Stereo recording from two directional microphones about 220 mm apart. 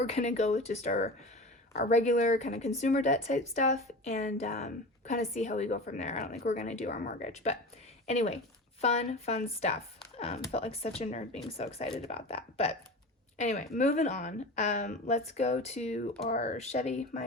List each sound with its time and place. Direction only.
0.0 s a woman's voice: 30° left (ahead or behind)